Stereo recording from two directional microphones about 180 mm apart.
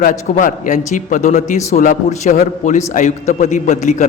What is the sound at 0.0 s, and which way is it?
A man's voice, 45° left (ahead or behind).